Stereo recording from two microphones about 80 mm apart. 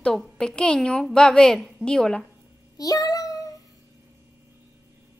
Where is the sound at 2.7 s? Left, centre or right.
Left.